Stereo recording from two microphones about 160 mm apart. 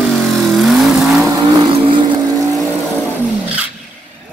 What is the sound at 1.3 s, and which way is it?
Vehicle, 30° right (ahead or behind).